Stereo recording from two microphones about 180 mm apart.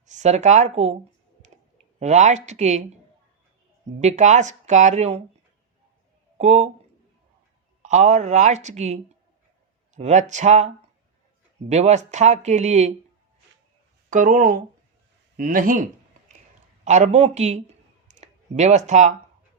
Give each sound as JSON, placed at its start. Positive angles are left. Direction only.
{"t": 0.0, "sound": "speech", "side_deg": -40}
{"t": 2.0, "sound": "speech", "side_deg": -40}
{"t": 4.0, "sound": "speech", "side_deg": -40}
{"t": 6.3, "sound": "speech", "side_deg": -40}
{"t": 7.8, "sound": "speech", "side_deg": -40}
{"t": 11.7, "sound": "speech", "side_deg": -40}
{"t": 14.1, "sound": "speech", "side_deg": -45}
{"t": 16.8, "sound": "speech", "side_deg": -40}